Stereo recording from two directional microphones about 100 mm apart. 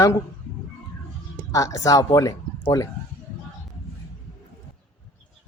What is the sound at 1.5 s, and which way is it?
Speech, 35° left (ahead or behind).